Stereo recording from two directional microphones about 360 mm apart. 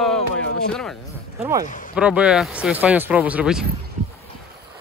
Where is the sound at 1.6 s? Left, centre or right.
Left.